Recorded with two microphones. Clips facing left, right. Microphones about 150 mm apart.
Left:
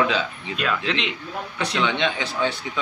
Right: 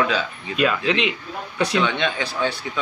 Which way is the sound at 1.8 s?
20° left (ahead or behind).